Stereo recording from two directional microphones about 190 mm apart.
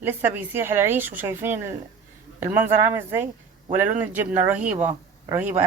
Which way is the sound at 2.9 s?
10° right (ahead or behind).